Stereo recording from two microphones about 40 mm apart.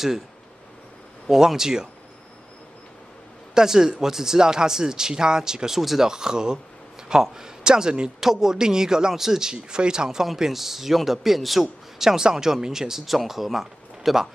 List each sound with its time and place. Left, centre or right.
1.3 s speech: centre
3.5 s speech: centre
5.8 s speech: centre
6.0 s speech: centre
8.2 s speech: centre
10.2 s speech: centre
11.6 s speech: centre